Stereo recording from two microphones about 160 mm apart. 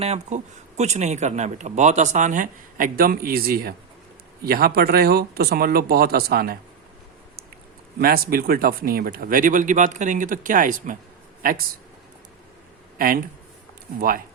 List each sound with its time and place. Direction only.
0.0 s speech: 45° right (ahead or behind); by 6.6 s 75° right (ahead or behind)
7.9 s speech: 70° right (ahead or behind)